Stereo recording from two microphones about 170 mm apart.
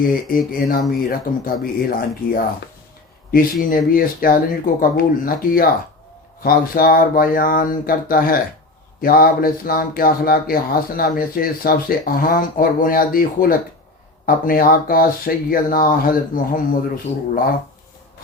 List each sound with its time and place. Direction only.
0.0 s speech: 55° left (ahead or behind)